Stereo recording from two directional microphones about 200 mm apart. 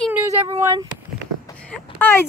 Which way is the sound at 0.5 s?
20° right (ahead or behind).